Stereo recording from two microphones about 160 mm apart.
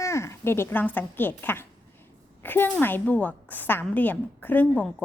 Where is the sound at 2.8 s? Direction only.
10° left (ahead or behind).